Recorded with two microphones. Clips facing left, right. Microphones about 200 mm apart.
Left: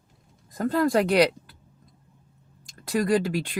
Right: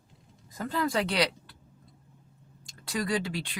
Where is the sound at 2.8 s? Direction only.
50° left (ahead or behind).